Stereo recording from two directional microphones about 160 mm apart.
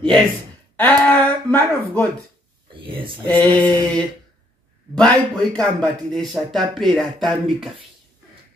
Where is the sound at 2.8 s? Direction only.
30° right (ahead or behind).